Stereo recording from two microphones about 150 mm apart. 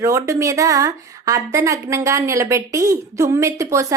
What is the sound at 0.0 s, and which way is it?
A woman's voice, 20° right (ahead or behind).